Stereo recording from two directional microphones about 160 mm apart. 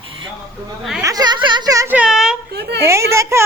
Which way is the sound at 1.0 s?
20° right (ahead or behind).